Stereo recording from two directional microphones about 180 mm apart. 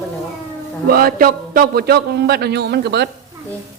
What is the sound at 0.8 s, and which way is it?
A man's voice, 55° right (ahead or behind).